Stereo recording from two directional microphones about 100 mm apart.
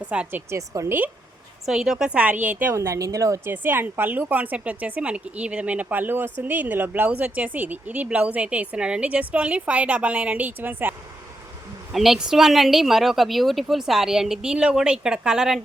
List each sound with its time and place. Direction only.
0.0 s speech: 15° right (ahead or behind)
1.6 s speech: 5° right (ahead or behind)
2.7 s a woman's voice: 30° right (ahead or behind)
3.5 s speech: 20° right (ahead or behind)
11.9 s a woman's voice: 5° right (ahead or behind)